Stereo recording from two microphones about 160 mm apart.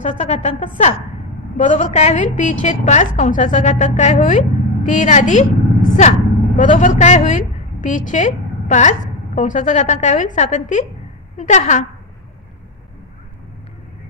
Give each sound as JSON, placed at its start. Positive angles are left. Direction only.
{"t": 0.0, "sound": "a woman's voice", "side_deg": 45}